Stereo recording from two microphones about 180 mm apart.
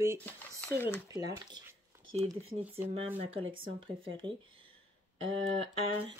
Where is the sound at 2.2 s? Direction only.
30° right (ahead or behind).